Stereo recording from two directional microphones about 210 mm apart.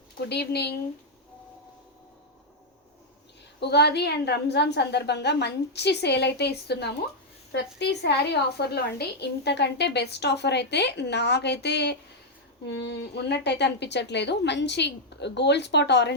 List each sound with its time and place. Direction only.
0.3 s a woman's voice: 50° left (ahead or behind)
3.6 s a woman's voice: 50° left (ahead or behind)